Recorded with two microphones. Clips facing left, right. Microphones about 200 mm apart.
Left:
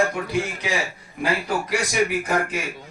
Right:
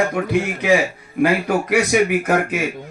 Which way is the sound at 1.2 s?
60° right (ahead or behind).